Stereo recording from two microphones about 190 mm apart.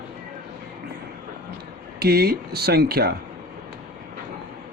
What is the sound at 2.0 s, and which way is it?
Speech, 55° right (ahead or behind).